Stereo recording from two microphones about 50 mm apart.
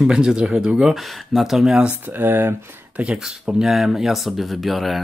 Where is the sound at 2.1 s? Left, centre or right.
Right.